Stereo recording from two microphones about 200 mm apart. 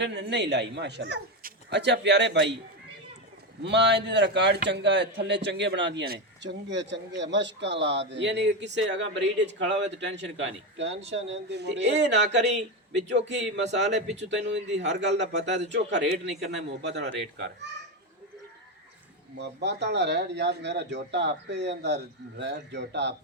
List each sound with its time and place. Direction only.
0.0 s a man's voice: 60° right (ahead or behind)
3.6 s a man's voice: 60° right (ahead or behind)
19.4 s a man's voice: 60° right (ahead or behind)